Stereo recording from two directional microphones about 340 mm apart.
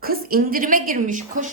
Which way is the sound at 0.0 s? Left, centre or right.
Right.